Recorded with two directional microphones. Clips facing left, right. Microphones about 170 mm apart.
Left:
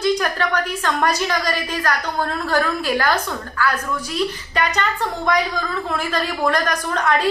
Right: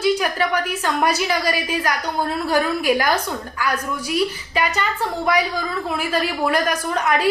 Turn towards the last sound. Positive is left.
turn(degrees=-10)  # may be behind; listen again after turning